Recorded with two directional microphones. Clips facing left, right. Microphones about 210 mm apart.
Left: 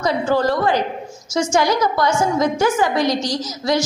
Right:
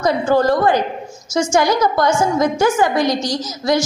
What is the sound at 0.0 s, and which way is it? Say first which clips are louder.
A woman's voice: right 3 dB; 45° right (ahead or behind).